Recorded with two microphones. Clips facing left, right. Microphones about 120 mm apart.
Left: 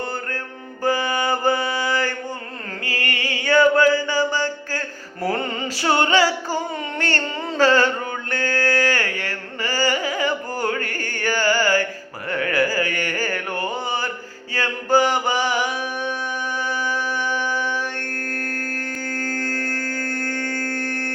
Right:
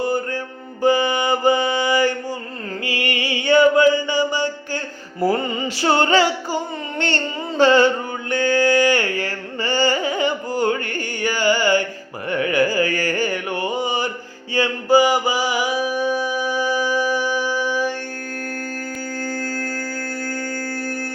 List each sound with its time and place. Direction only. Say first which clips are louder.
0.0 s mantra: right 6 dB; 10° right (ahead or behind)
5.3 s music: even; 5° right (ahead or behind)
5.6 s music: right 2 dB; 25° right (ahead or behind)
7.5 s music: right 3 dB; 15° right (ahead or behind)
12.3 s a sound: right 3 dB; 20° right (ahead or behind)
13.1 s a sound: right 3 dB; 15° right (ahead or behind)
14.5 s mantra: right 3 dB; 10° right (ahead or behind)